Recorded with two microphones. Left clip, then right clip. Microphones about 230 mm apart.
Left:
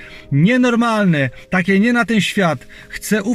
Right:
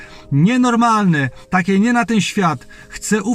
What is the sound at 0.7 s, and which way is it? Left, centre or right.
Speech, right.